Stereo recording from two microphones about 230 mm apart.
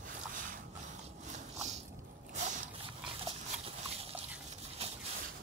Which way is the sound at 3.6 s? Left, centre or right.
Right.